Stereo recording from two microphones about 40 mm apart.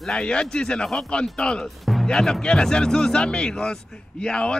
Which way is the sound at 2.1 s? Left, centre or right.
Centre.